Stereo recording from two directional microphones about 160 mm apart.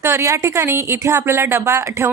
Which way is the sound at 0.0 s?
15° right (ahead or behind).